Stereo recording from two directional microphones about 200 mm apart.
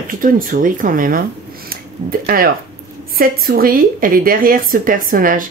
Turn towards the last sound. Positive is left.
turn(degrees=-45)  # may be behind; listen again after turning